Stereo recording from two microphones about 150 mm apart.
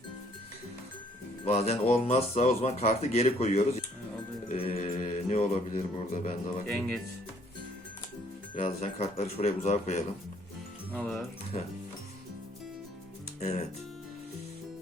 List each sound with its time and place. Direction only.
1.5 s a man's voice: 45° left (ahead or behind)
4.4 s mantra: 40° left (ahead or behind)
6.7 s speech: 5° left (ahead or behind)
8.6 s a man's voice: 45° left (ahead or behind)
10.9 s speech: 5° left (ahead or behind)
11.5 s a man's voice: 45° left (ahead or behind)
13.4 s speech: 45° left (ahead or behind)